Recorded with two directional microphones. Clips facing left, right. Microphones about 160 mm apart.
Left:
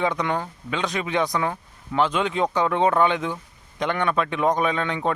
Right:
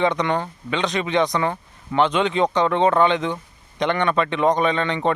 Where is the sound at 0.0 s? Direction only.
5° left (ahead or behind).